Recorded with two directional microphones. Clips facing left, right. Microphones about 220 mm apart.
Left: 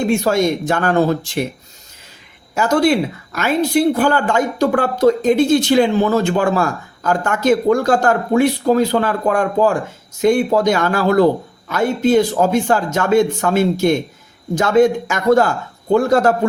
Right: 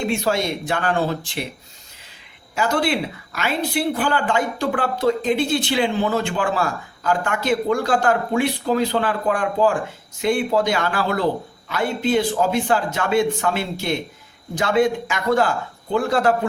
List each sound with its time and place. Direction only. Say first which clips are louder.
0.1 s speech: left 6 dB; 45° left (ahead or behind)
2.6 s speech: left 6 dB; 45° left (ahead or behind)